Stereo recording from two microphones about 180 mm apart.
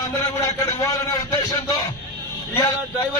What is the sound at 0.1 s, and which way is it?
Speech, 15° left (ahead or behind).